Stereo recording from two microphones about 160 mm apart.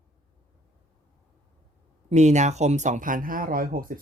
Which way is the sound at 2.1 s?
45° right (ahead or behind).